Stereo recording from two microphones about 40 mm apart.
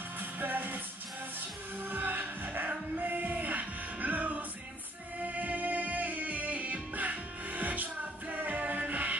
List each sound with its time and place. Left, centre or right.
0.2 s music: right
1.9 s music: right